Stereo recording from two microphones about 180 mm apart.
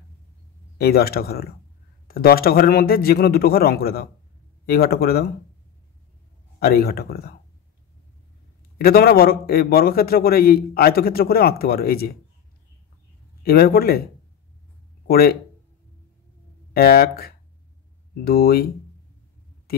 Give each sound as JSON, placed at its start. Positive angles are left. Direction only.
{"t": 0.7, "sound": "a man's voice", "side_deg": 60}
{"t": 6.6, "sound": "a man's voice", "side_deg": 60}
{"t": 8.7, "sound": "a man's voice", "side_deg": 55}
{"t": 13.4, "sound": "a man's voice", "side_deg": 60}
{"t": 15.0, "sound": "speech", "side_deg": 55}
{"t": 16.7, "sound": "a man's voice", "side_deg": 60}